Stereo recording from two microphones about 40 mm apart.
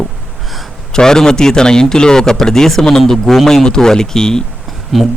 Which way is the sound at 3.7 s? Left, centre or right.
Centre.